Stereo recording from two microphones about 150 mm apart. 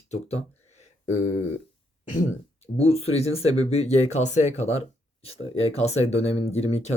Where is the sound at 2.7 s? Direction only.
45° left (ahead or behind).